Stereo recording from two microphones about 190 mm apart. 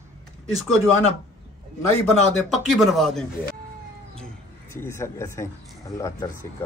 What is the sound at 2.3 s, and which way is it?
Speech, centre (ahead or behind).